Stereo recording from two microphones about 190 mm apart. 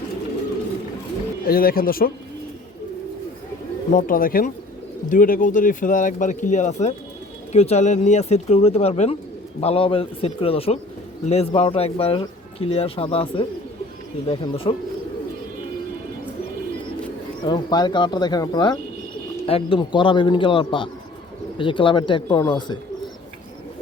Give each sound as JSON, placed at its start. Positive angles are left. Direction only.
{"t": 1.5, "sound": "speech", "side_deg": 50}
{"t": 3.9, "sound": "speech", "side_deg": 45}
{"t": 17.4, "sound": "speech", "side_deg": 25}